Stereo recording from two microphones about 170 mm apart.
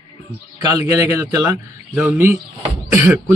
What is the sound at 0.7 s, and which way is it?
A man's voice, 20° right (ahead or behind).